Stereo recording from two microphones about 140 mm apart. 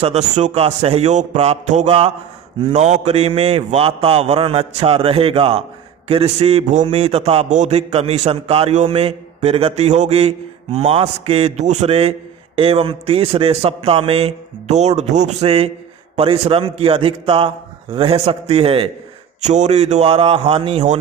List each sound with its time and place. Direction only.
0.0 s a man's voice: 55° right (ahead or behind)
19.4 s a man's voice: 55° right (ahead or behind); by 20.8 s 40° right (ahead or behind)